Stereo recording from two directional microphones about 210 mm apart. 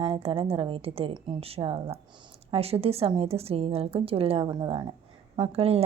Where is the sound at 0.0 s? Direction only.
25° right (ahead or behind).